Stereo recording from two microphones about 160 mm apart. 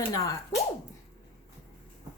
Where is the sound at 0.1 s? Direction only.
20° left (ahead or behind).